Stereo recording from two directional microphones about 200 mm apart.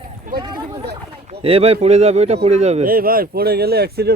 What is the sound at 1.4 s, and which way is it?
Speech, 30° right (ahead or behind).